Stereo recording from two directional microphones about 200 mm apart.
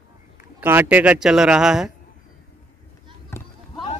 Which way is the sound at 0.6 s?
10° right (ahead or behind).